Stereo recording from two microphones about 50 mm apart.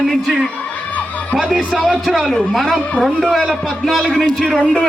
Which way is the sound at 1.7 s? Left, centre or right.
Centre.